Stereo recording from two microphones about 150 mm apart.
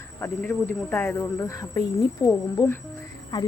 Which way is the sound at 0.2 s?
15° left (ahead or behind).